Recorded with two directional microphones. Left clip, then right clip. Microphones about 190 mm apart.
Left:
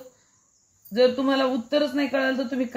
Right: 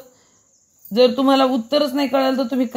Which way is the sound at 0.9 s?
40° right (ahead or behind).